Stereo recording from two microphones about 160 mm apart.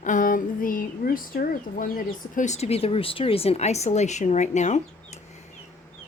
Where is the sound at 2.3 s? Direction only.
50° left (ahead or behind).